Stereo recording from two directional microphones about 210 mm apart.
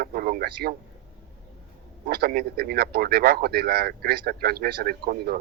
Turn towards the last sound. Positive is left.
turn(degrees=-50)  # may be behind; listen again after turning